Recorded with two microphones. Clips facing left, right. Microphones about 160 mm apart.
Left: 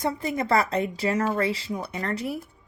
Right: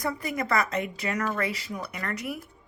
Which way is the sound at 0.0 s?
25° left (ahead or behind).